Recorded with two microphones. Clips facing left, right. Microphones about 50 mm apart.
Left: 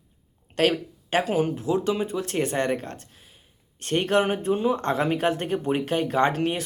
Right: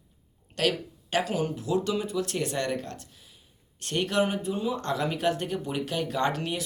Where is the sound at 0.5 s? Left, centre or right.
Left.